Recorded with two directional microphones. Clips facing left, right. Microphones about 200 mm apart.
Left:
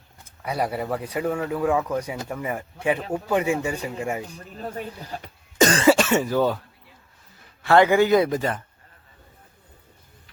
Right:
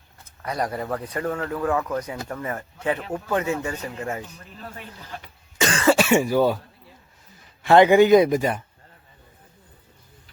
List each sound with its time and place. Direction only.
0.4 s speech: 10° left (ahead or behind)
4.4 s speech: 40° left (ahead or behind)
6.0 s speech: 10° right (ahead or behind)
7.6 s a man's voice: 20° right (ahead or behind)